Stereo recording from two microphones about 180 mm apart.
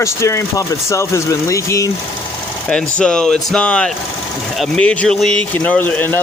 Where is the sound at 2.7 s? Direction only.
5° left (ahead or behind).